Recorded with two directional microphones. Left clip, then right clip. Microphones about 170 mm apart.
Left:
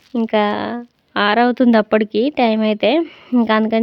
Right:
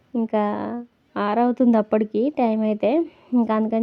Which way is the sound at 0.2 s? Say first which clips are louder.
Left 6 dB; centre (ahead or behind).